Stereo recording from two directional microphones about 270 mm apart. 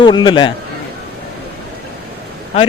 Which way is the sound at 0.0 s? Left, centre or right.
Centre.